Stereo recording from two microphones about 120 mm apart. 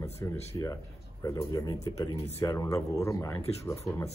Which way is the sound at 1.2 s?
25° left (ahead or behind).